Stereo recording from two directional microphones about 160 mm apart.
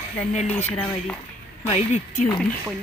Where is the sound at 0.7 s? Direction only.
5° left (ahead or behind).